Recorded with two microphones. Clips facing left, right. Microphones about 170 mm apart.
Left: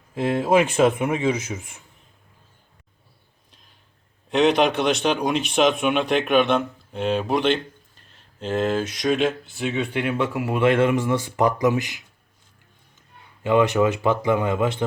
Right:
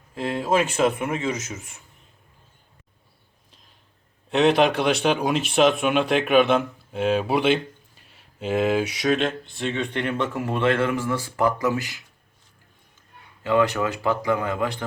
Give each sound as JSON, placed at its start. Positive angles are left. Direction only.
{"t": 0.1, "sound": "a man's voice", "side_deg": 20}
{"t": 4.3, "sound": "speech", "side_deg": 0}
{"t": 13.4, "sound": "speech", "side_deg": 20}